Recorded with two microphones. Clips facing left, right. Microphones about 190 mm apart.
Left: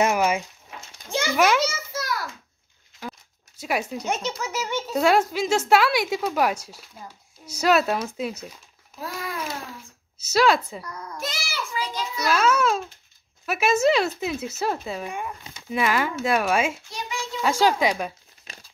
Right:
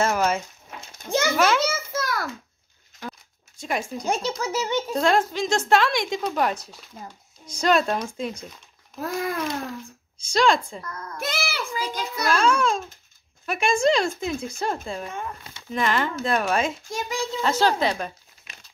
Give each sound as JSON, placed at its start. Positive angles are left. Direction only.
{"t": 0.0, "sound": "speech", "side_deg": 15}
{"t": 1.6, "sound": "a sound", "side_deg": -55}
{"t": 3.0, "sound": "zipper", "side_deg": 5}
{"t": 4.0, "sound": "a child's voice", "side_deg": -35}
{"t": 4.9, "sound": "speech", "side_deg": 10}
{"t": 9.0, "sound": "a child's voice", "side_deg": -50}
{"t": 10.1, "sound": "speech", "side_deg": 5}
{"t": 11.1, "sound": "a sound", "side_deg": -55}
{"t": 11.7, "sound": "a child's voice", "side_deg": -50}
{"t": 12.3, "sound": "a child's voice", "side_deg": 5}
{"t": 16.9, "sound": "a child's voice", "side_deg": -35}
{"t": 17.4, "sound": "speech", "side_deg": 10}